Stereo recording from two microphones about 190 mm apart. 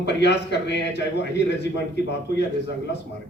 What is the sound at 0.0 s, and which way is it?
Speech, 65° left (ahead or behind).